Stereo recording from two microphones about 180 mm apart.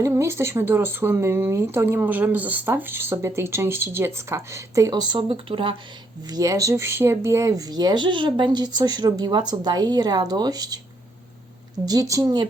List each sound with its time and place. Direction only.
0.0 s speech: 15° right (ahead or behind)
11.9 s speech: 20° right (ahead or behind)